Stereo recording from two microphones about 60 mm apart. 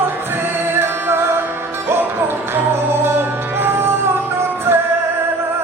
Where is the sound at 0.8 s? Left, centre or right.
Right.